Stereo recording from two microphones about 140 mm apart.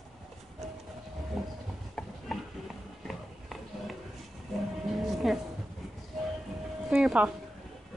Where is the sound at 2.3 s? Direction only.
Centre (ahead or behind).